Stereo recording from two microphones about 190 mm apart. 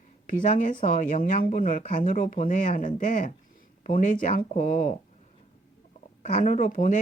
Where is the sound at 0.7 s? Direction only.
45° left (ahead or behind).